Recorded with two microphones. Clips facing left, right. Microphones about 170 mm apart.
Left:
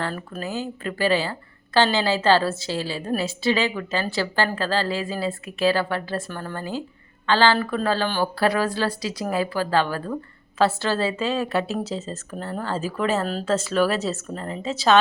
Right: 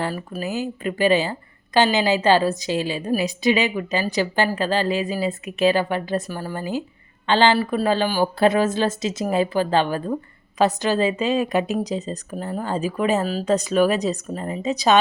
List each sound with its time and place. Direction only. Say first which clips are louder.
0.0 s a woman's voice: right 3 dB; 10° right (ahead or behind)